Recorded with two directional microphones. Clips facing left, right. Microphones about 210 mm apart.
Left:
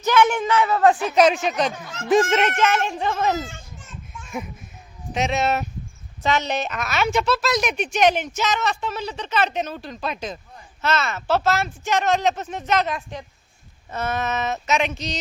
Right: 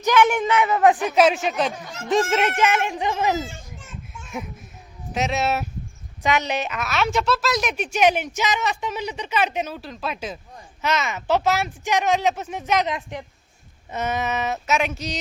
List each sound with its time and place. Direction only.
0.0 s a woman's voice: 15° right (ahead or behind)
1.1 s speech: 5° right (ahead or behind)
2.6 s a woman's voice: 15° right (ahead or behind)
3.5 s children playing: centre (ahead or behind)
5.1 s a woman's voice: 5° right (ahead or behind)